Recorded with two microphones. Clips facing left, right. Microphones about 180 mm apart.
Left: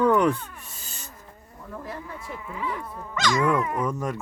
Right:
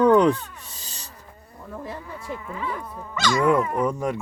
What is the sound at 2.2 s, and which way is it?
Speech, 5° left (ahead or behind).